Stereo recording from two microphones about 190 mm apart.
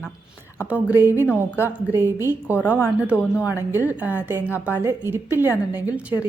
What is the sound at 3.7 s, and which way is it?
A woman's voice, 10° right (ahead or behind).